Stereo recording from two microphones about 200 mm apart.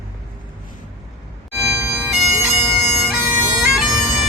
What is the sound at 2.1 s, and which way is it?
Bagpipes, centre (ahead or behind).